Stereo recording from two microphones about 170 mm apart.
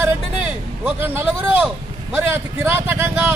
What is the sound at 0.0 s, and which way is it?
Vehicle, 10° right (ahead or behind).